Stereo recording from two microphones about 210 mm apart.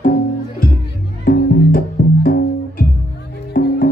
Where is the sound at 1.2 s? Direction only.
45° left (ahead or behind).